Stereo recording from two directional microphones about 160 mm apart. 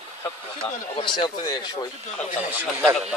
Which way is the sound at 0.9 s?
30° left (ahead or behind).